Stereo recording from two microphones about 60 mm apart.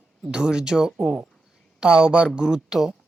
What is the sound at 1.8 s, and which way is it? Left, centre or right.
Speech, centre.